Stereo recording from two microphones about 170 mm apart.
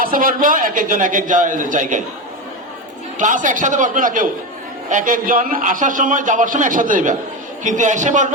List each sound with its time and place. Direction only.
0.0 s a man's voice: 55° right (ahead or behind)
3.2 s a man's voice: 50° right (ahead or behind)